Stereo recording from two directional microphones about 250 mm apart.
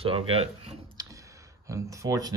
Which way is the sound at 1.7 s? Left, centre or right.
Centre.